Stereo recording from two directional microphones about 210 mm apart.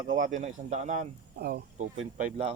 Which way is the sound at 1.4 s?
45° right (ahead or behind).